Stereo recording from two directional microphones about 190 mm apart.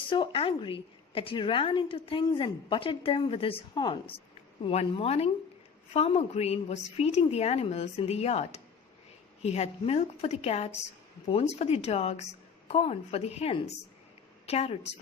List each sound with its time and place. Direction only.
0.1 s a woman's voice: 30° left (ahead or behind)